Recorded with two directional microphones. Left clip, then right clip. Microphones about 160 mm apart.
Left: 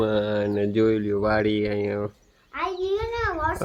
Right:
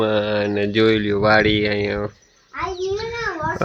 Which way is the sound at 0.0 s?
5° right (ahead or behind).